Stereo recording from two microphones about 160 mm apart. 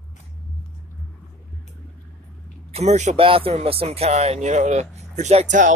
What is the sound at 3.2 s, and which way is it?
Speech, 35° right (ahead or behind).